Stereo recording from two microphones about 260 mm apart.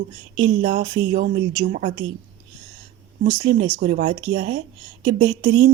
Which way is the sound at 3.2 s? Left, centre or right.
Right.